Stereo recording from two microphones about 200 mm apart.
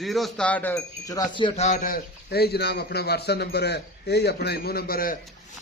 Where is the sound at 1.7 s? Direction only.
40° left (ahead or behind).